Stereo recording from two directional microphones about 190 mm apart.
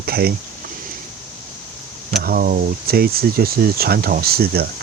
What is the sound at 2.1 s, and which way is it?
Speech, 50° right (ahead or behind).